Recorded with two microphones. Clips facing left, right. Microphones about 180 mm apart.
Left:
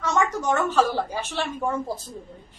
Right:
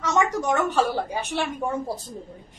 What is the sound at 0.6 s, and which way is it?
Speech, 15° right (ahead or behind).